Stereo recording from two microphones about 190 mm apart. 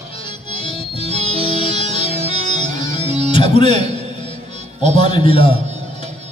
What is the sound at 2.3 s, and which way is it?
Music, 35° right (ahead or behind).